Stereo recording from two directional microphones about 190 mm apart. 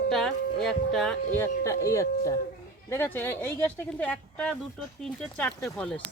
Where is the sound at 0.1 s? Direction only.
Centre (ahead or behind).